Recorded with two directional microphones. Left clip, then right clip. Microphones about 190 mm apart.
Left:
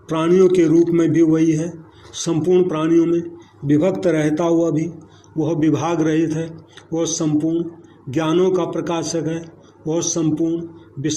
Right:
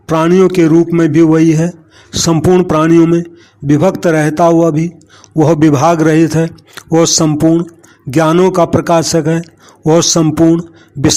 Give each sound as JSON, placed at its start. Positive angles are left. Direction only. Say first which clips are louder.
{"t": 0.1, "sound": "a man's voice", "louder": "right 5 dB", "side_deg": -45}